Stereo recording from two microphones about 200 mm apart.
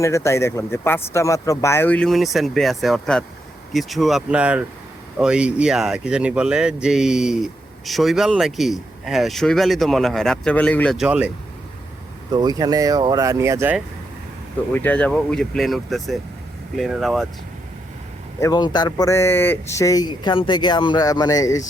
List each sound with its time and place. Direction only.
0.0 s speech: 15° left (ahead or behind); by 11.3 s 5° right (ahead or behind)
12.3 s speech: 20° right (ahead or behind)
14.7 s speech: 10° left (ahead or behind)
18.3 s speech: 20° left (ahead or behind)